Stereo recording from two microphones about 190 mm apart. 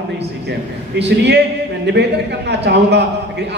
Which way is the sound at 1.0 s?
65° right (ahead or behind).